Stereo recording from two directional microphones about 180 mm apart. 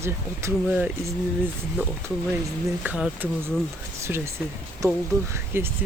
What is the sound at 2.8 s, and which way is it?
Speech, 10° right (ahead or behind).